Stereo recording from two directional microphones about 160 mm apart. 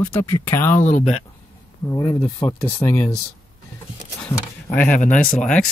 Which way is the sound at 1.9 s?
20° left (ahead or behind).